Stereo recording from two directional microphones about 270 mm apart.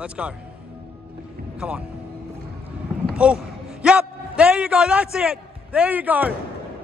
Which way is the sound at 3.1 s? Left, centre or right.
Centre.